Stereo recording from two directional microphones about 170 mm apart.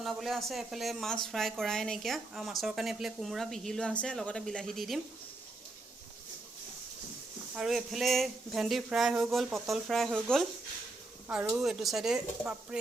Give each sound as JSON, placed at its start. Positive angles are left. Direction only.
{"t": 0.0, "sound": "speech", "side_deg": 0}
{"t": 7.5, "sound": "speech", "side_deg": 0}
{"t": 11.5, "sound": "speech", "side_deg": 0}